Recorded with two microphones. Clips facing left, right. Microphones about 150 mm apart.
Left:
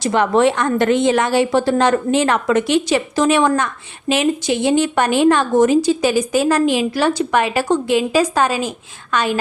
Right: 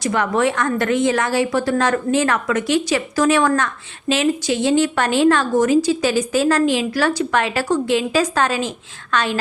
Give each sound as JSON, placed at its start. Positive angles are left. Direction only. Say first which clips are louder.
{"t": 0.0, "sound": "a woman's voice", "louder": "left 4 dB", "side_deg": 25}